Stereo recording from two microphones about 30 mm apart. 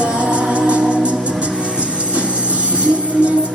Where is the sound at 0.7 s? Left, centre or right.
Right.